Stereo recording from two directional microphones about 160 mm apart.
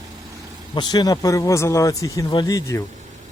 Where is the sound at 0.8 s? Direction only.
25° left (ahead or behind).